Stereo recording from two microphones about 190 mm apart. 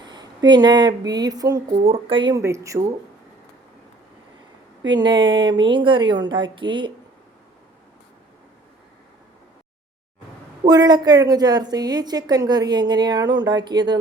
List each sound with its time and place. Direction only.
0.0 s speech: 25° right (ahead or behind)
1.8 s a woman's voice: 30° right (ahead or behind)
4.9 s a woman's voice: 25° right (ahead or behind)
10.7 s a woman's voice: 20° right (ahead or behind)